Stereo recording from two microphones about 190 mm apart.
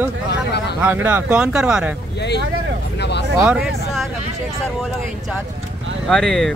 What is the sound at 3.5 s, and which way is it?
Speech, centre (ahead or behind).